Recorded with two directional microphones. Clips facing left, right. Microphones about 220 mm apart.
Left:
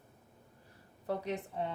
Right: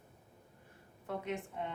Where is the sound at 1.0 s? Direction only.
35° left (ahead or behind).